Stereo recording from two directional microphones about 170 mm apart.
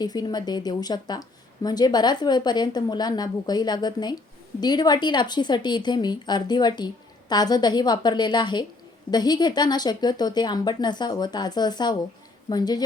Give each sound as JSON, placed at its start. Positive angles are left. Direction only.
{"t": 0.0, "sound": "a woman's voice", "side_deg": 25}